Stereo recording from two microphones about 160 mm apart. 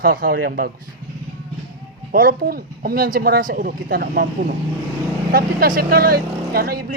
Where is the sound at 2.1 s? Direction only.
60° right (ahead or behind).